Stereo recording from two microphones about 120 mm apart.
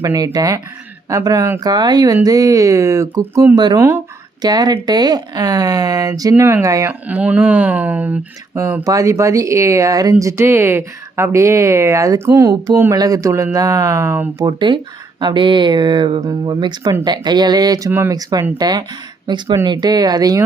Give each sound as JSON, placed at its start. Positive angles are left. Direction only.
{"t": 0.0, "sound": "speech", "side_deg": -30}
{"t": 3.8, "sound": "speech", "side_deg": -20}
{"t": 4.4, "sound": "speech", "side_deg": -35}
{"t": 7.1, "sound": "speech", "side_deg": -10}
{"t": 8.5, "sound": "speech", "side_deg": -25}
{"t": 14.3, "sound": "speech", "side_deg": -40}